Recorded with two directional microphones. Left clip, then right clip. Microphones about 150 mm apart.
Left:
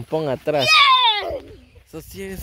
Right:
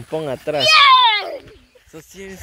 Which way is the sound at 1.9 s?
45° left (ahead or behind).